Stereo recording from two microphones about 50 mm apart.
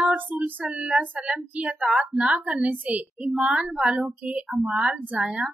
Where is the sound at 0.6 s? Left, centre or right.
Centre.